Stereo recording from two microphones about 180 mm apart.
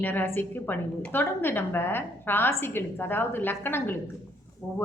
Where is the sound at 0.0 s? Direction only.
10° left (ahead or behind).